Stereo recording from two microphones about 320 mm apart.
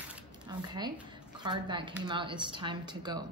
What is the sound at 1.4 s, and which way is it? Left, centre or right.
Speech, centre.